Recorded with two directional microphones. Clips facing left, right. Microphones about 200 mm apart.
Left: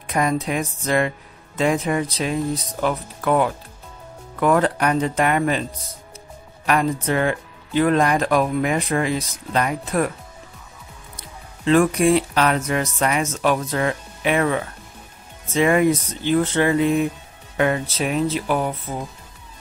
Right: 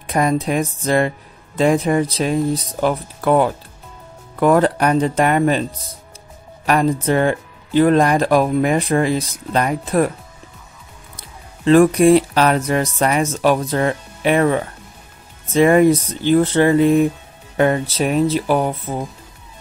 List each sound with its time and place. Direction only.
0.0 s speech: 35° right (ahead or behind)
6.6 s speech: 35° right (ahead or behind)
11.6 s speech: 40° right (ahead or behind)